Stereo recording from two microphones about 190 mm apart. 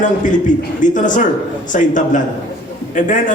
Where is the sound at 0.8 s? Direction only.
45° left (ahead or behind).